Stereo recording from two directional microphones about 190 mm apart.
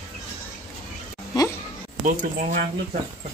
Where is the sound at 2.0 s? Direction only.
40° right (ahead or behind).